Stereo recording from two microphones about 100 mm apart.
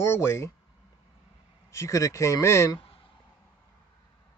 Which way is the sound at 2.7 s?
70° left (ahead or behind).